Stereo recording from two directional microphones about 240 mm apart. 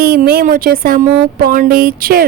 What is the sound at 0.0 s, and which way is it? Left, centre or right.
A woman's voice, right.